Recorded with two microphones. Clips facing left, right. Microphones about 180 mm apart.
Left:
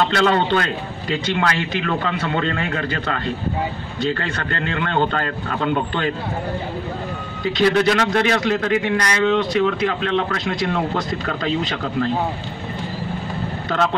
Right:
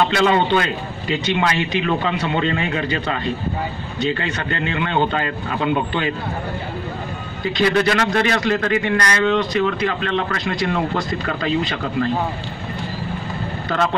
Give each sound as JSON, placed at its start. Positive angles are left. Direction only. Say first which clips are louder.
{"t": 0.0, "sound": "a man's voice", "louder": "right 1 dB", "side_deg": -10}
{"t": 7.4, "sound": "a man's voice", "louder": "left 1 dB", "side_deg": 0}